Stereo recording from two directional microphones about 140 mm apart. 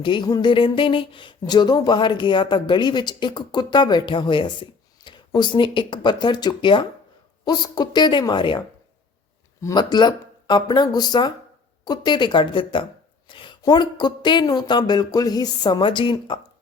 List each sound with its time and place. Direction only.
0.0 s a woman's voice: 35° left (ahead or behind)